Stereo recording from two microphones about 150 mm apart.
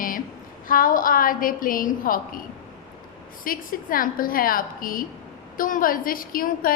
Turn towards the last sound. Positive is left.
turn(degrees=70)  # may be behind; listen again after turning